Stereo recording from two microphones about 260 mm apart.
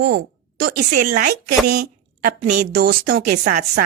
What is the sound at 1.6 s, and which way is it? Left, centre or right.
Speech, right.